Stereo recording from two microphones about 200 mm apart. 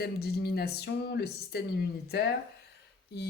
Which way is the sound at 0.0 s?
50° left (ahead or behind).